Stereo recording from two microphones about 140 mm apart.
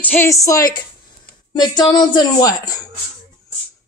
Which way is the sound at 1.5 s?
30° left (ahead or behind).